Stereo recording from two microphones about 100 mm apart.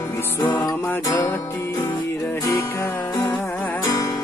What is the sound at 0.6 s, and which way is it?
Music, 35° left (ahead or behind).